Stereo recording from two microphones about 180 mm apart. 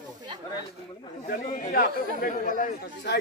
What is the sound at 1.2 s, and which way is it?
Speech, 50° left (ahead or behind).